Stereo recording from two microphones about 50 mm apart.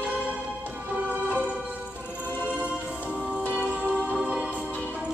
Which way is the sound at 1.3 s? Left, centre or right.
Right.